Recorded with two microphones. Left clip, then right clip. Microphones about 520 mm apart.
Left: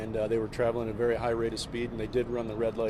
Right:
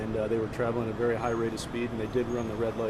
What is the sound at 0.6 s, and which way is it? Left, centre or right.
Speech, left.